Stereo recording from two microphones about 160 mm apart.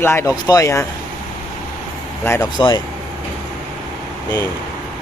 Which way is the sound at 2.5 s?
25° left (ahead or behind).